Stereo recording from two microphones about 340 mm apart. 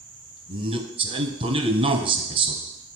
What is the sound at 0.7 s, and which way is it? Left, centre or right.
A man's voice, centre.